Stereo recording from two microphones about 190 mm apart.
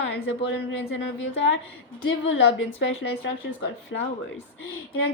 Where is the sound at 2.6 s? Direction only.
85° left.